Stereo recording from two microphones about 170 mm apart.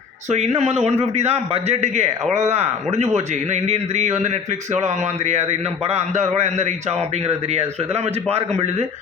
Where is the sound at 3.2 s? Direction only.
40° right (ahead or behind).